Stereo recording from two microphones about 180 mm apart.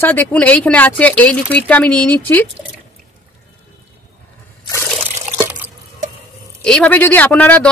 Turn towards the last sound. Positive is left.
turn(degrees=10)  # may be behind; listen again after turning